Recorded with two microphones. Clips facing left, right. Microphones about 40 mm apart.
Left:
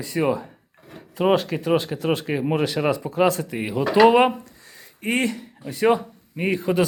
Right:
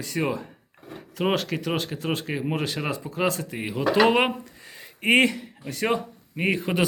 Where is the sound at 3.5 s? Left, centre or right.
Centre.